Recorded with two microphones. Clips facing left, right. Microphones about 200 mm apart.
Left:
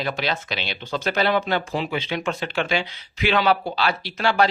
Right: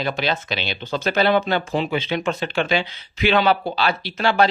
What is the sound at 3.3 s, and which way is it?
Speech, 25° right (ahead or behind).